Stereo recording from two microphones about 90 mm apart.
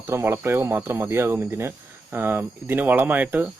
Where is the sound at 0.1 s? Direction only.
25° right (ahead or behind).